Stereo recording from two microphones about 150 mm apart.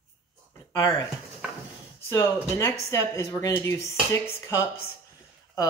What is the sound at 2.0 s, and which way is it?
Speech, 20° left (ahead or behind).